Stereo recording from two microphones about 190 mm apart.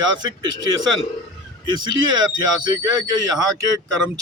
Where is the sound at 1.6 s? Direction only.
25° right (ahead or behind).